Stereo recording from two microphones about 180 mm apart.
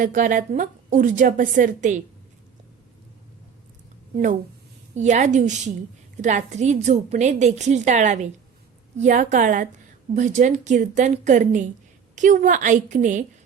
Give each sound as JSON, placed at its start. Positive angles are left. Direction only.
{"t": 0.0, "sound": "a woman's voice", "side_deg": -45}
{"t": 4.9, "sound": "a woman's voice", "side_deg": -40}